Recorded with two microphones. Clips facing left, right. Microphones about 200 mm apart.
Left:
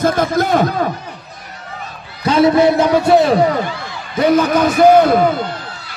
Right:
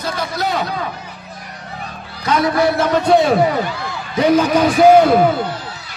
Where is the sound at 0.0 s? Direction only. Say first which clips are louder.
Left 7 dB; 50° left (ahead or behind).